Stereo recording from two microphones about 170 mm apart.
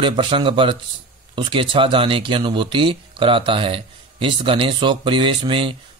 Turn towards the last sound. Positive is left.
turn(degrees=-30)  # may be behind; listen again after turning